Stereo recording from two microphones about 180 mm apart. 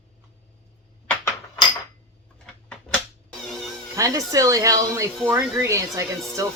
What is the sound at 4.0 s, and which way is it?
A woman's voice, 20° right (ahead or behind).